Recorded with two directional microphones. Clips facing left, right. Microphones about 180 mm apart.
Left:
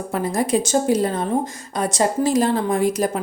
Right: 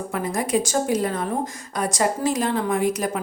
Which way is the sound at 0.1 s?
30° left (ahead or behind).